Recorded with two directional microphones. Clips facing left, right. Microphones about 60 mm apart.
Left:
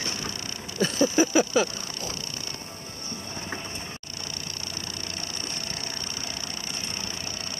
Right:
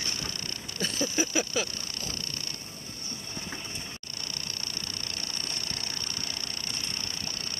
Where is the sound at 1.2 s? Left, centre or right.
Left.